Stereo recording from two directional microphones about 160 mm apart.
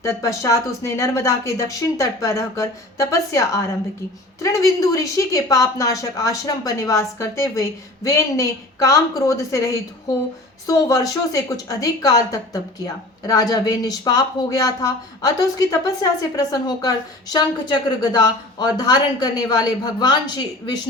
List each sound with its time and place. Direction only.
0.0 s a woman's voice: 20° left (ahead or behind)